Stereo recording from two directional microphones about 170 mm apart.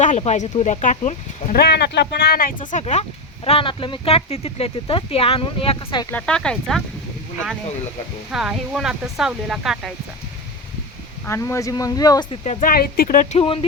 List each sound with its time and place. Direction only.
0.0 s speech: 45° left (ahead or behind)
1.5 s speech: 75° left (ahead or behind)
2.7 s speech: 40° left (ahead or behind)
6.1 s speech: 5° left (ahead or behind)
8.3 s speech: 5° right (ahead or behind)
11.3 s speech: 15° left (ahead or behind)
12.6 s speech: 60° left (ahead or behind)
13.4 s speech: 30° left (ahead or behind)